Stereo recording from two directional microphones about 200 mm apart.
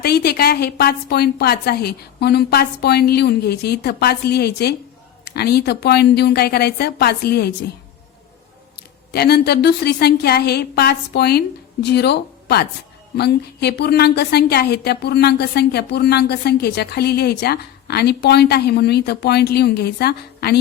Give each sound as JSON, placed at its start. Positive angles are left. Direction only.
{"t": 0.0, "sound": "a woman's voice", "side_deg": 55}
{"t": 9.1, "sound": "a woman's voice", "side_deg": 55}